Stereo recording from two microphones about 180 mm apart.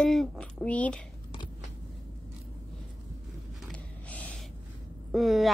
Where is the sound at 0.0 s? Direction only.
Centre (ahead or behind).